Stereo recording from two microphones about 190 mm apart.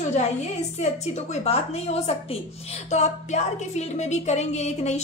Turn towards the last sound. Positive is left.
turn(degrees=35)  # may be behind; listen again after turning